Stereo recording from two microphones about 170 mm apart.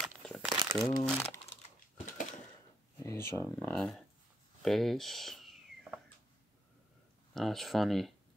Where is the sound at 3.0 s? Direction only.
20° left (ahead or behind).